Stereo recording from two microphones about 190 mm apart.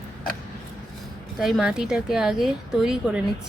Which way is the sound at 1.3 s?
Centre (ahead or behind).